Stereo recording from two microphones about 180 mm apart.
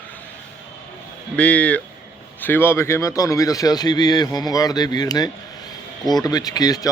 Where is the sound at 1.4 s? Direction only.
5° left (ahead or behind).